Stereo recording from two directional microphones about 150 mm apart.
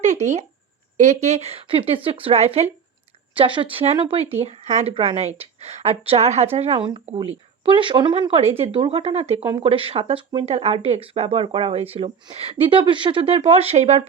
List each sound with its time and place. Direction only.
0.0 s speech: 50° right (ahead or behind)
3.3 s speech: 35° right (ahead or behind)